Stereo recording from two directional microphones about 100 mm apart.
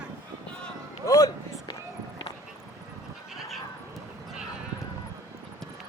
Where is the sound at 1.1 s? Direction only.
35° left (ahead or behind).